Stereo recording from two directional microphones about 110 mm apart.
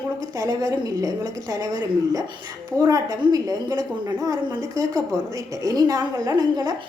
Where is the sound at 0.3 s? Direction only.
30° right (ahead or behind).